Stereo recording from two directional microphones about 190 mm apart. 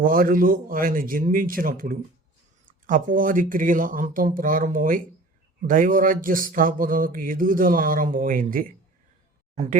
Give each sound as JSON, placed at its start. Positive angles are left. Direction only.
{"t": 0.0, "sound": "speech", "side_deg": -50}